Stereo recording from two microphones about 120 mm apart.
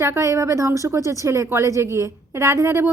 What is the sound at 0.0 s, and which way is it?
A woman's voice, 25° right (ahead or behind).